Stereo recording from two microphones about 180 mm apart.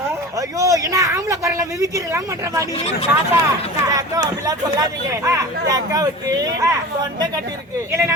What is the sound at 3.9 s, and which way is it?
Speech, 20° right (ahead or behind).